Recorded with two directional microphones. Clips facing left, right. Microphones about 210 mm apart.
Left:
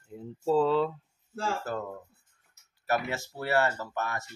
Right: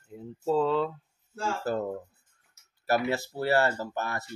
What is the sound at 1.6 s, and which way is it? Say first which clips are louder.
Speech: right 5 dB; 35° right (ahead or behind).